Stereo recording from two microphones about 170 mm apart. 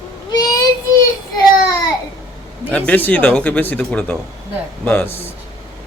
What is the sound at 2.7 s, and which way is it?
Speech, 10° left (ahead or behind).